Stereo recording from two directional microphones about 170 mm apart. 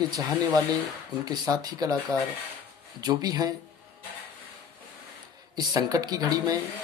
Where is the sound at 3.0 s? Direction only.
20° right (ahead or behind).